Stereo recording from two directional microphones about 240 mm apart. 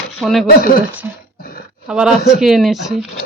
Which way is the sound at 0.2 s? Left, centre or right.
Centre.